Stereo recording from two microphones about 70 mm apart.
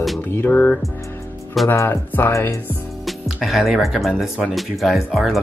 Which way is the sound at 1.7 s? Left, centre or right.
Left.